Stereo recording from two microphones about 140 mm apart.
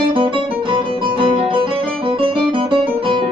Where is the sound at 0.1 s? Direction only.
40° right (ahead or behind).